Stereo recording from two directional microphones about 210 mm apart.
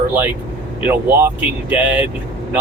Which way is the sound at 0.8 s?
10° right (ahead or behind).